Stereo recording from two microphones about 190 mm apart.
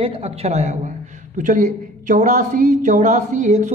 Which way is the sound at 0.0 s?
30° right (ahead or behind).